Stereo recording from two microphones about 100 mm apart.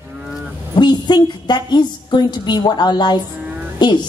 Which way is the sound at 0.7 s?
50° left (ahead or behind).